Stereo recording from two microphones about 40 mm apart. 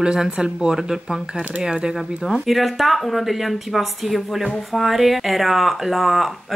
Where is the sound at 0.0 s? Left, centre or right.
Centre.